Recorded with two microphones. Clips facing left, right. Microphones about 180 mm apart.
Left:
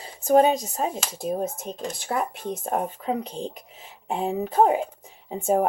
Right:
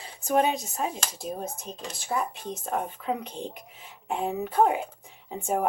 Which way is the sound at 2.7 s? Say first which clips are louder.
Left 3 dB; 35° left (ahead or behind).